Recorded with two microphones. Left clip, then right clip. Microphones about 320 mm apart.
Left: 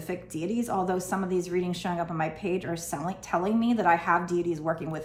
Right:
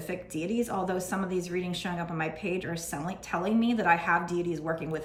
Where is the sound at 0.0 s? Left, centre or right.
Centre.